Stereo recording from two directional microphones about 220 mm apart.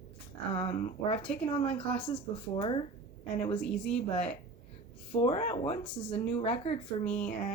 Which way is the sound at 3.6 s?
5° left (ahead or behind).